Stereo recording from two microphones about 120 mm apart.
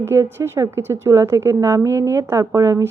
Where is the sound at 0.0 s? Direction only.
20° right (ahead or behind).